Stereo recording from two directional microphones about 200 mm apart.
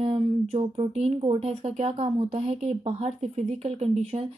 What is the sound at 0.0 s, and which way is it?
Speech, 30° right (ahead or behind).